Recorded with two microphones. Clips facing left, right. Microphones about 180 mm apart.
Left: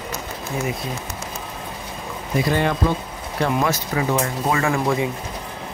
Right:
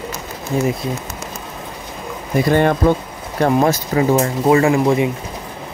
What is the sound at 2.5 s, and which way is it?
Speech, 55° right (ahead or behind).